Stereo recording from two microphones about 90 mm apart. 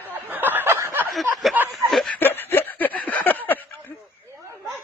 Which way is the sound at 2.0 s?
20° left (ahead or behind).